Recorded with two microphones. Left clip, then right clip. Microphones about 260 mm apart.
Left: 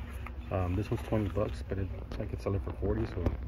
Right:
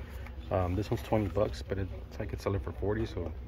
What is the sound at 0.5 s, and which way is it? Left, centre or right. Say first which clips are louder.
Speech: right 3 dB; centre.